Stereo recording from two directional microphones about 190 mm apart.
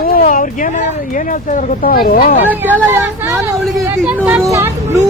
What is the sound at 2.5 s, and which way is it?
Speech, 10° right (ahead or behind).